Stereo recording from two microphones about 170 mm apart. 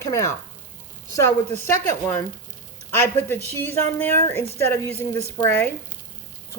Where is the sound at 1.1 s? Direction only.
15° left (ahead or behind).